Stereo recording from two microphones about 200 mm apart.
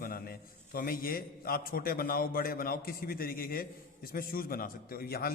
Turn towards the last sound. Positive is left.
turn(degrees=50)  # may be behind; listen again after turning